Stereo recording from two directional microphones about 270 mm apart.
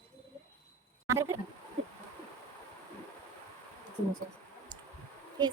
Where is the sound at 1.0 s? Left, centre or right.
Centre.